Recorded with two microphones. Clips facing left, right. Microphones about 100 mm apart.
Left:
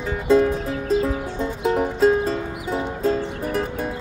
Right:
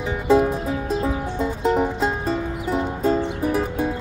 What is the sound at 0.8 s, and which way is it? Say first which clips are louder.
Music: left 2 dB; 5° right (ahead or behind).